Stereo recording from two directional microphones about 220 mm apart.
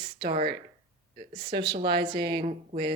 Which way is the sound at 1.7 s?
45° right (ahead or behind).